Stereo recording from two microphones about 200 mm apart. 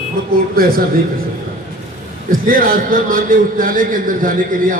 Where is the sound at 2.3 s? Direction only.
45° right (ahead or behind).